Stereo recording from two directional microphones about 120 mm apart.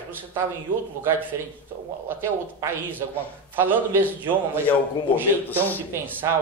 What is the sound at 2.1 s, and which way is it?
A woman's voice, 20° right (ahead or behind).